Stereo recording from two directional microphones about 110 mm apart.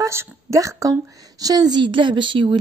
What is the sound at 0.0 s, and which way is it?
A woman's voice, 25° right (ahead or behind).